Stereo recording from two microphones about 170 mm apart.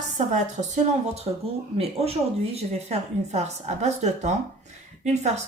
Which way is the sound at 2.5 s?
40° right (ahead or behind).